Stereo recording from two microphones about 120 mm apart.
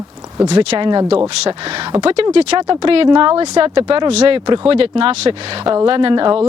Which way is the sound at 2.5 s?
40° right (ahead or behind).